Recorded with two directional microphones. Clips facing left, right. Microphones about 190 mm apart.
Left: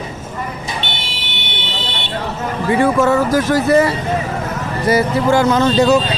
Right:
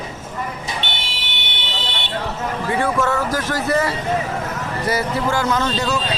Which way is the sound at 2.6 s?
10° left (ahead or behind).